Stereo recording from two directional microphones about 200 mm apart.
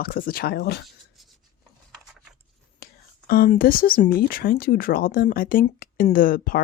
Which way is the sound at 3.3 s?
45° left (ahead or behind).